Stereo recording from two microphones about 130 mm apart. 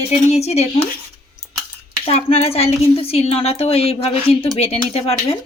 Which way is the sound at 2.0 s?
50° left (ahead or behind).